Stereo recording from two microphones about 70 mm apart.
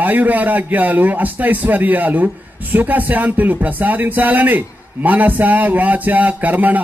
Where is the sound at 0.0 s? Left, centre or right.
Right.